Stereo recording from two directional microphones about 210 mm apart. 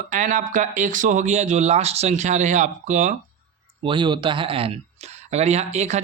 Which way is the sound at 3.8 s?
20° right (ahead or behind).